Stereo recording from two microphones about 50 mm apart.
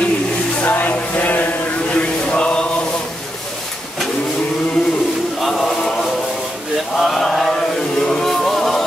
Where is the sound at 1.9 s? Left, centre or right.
Left.